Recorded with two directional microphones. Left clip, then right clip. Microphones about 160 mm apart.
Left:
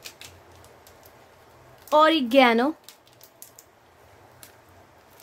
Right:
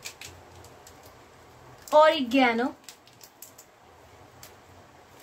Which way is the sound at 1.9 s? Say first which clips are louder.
Left 1 dB; 90° left.